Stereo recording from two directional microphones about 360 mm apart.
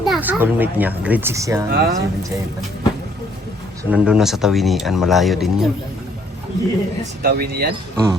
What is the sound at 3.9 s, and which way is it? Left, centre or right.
A child's voice, centre.